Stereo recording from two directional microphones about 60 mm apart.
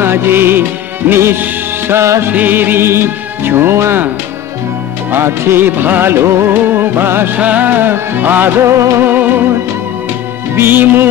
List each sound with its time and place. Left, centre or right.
0.0 s music: right
2.3 s music: right
5.1 s music: right
7.3 s music: right
9.0 s music: right
10.5 s music: right